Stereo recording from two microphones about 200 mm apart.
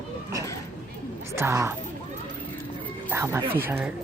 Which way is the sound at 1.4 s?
15° right (ahead or behind).